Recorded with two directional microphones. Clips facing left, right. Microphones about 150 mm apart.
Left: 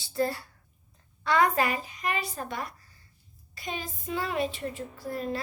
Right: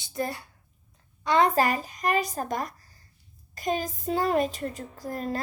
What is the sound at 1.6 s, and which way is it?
A child's voice, 40° right (ahead or behind).